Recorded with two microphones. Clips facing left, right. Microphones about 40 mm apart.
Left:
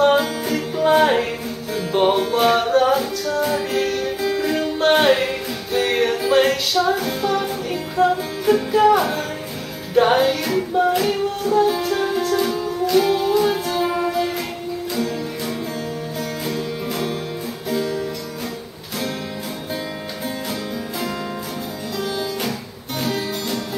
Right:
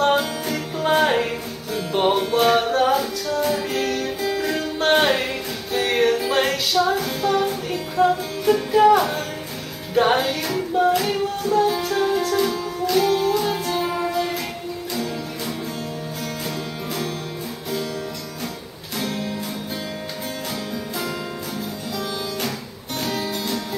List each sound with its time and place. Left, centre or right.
0.0 s music: centre
16.4 s music: centre
21.9 s music: centre